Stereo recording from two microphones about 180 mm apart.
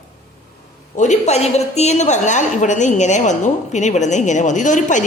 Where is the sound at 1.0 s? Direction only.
40° left (ahead or behind).